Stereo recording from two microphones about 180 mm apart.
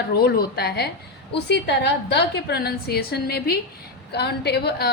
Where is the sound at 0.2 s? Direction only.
60° left (ahead or behind).